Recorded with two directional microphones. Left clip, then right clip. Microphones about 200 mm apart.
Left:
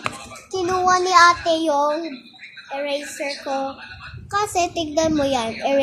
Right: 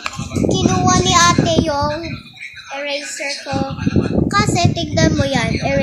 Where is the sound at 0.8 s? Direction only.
20° right (ahead or behind).